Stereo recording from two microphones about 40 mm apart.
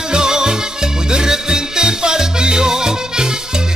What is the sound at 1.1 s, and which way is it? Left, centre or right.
Salsa music, centre.